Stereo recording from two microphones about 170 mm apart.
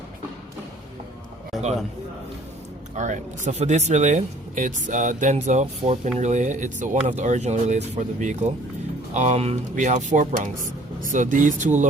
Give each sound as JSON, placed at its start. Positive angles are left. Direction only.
{"t": 2.9, "sound": "speech", "side_deg": -45}